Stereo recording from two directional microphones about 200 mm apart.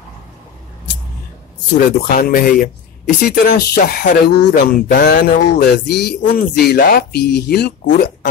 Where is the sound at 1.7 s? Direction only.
45° left (ahead or behind).